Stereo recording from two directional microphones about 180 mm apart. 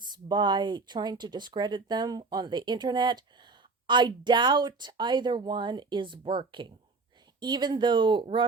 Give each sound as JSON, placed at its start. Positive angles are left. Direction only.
{"t": 0.0, "sound": "speech", "side_deg": -25}